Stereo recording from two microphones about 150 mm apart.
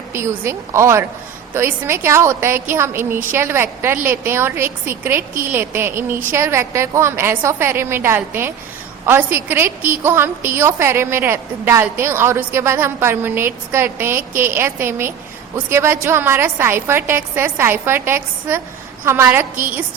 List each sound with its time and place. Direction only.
0.1 s a woman's voice: 15° right (ahead or behind)